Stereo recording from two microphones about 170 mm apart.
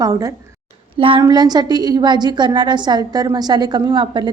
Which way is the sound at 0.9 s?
30° right (ahead or behind).